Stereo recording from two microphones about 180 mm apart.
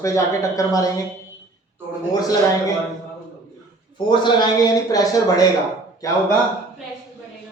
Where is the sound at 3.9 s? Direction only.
25° left (ahead or behind).